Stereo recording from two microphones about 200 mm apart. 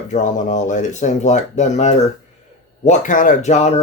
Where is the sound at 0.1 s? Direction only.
40° left (ahead or behind).